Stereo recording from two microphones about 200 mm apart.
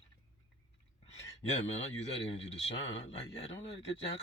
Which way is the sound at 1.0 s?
35° left (ahead or behind).